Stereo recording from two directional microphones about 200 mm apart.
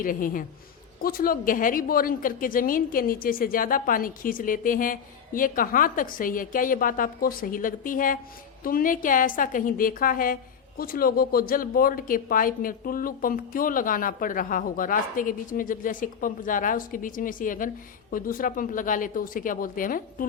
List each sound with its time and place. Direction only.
0.0 s a woman's voice: 45° left (ahead or behind)